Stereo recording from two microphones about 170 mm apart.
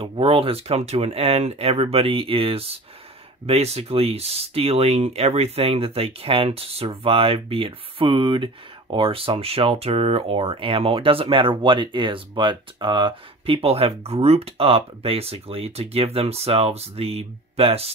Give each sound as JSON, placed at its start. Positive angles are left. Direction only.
{"t": 0.0, "sound": "speech", "side_deg": -35}